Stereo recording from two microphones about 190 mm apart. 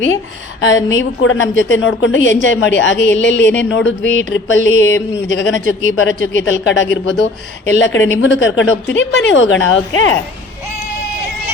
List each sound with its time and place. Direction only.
0.6 s a woman's voice: 90° left